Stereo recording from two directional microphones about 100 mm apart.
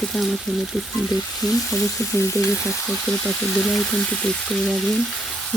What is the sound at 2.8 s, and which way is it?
Speech, 5° left (ahead or behind).